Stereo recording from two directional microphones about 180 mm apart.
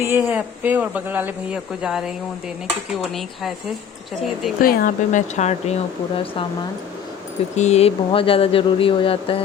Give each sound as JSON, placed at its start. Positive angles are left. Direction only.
{"t": 0.0, "sound": "speech", "side_deg": -15}
{"t": 1.8, "sound": "dishes", "side_deg": -5}
{"t": 4.6, "sound": "speech", "side_deg": 55}
{"t": 7.5, "sound": "speech", "side_deg": 40}